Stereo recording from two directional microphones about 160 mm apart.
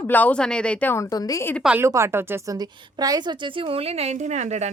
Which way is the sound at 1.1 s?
20° left (ahead or behind).